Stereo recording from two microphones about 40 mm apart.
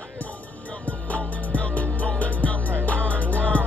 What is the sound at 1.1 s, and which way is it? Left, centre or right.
Music, left.